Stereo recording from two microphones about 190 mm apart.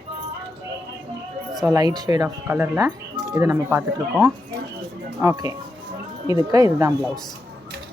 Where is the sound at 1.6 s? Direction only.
20° right (ahead or behind).